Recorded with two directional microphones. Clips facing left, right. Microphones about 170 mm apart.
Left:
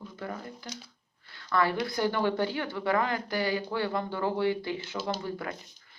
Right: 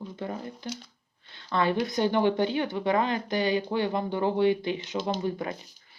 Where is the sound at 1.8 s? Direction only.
20° right (ahead or behind).